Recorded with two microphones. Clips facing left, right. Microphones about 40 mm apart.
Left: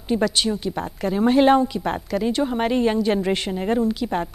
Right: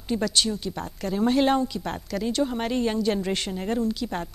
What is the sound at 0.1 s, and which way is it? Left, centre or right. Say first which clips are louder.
Speech: left 4 dB; centre.